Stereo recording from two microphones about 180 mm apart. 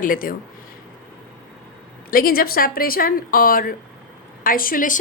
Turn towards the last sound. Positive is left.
turn(degrees=50)  # may be behind; listen again after turning